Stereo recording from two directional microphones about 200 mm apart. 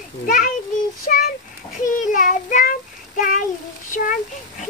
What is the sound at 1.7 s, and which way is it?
Child singing, 40° left (ahead or behind).